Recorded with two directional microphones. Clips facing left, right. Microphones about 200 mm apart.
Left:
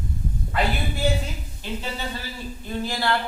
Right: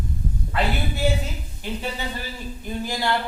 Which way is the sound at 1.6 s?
15° right (ahead or behind).